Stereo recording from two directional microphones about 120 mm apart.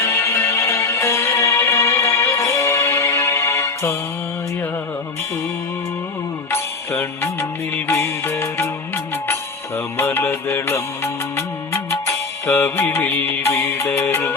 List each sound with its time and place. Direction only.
0.0 s music: 20° left (ahead or behind)
6.5 s music: 20° left (ahead or behind)
10.0 s music: 20° left (ahead or behind)